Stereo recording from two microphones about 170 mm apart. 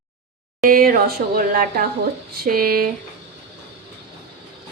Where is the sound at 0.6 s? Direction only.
60° right (ahead or behind).